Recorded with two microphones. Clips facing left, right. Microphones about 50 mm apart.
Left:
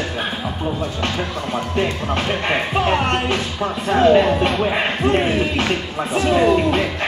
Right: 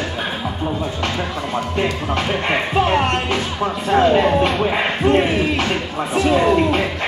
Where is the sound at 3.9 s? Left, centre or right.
Right.